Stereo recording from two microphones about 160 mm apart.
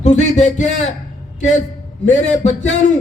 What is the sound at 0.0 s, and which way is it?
Speech, 50° left (ahead or behind).